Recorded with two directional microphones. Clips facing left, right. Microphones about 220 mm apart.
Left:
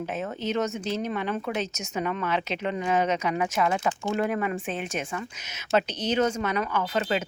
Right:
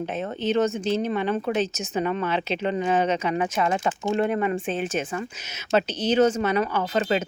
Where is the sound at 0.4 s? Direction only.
30° right (ahead or behind).